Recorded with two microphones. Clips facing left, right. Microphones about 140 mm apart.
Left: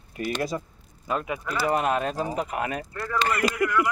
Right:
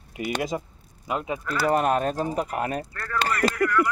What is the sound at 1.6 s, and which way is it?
Speech, 45° right (ahead or behind).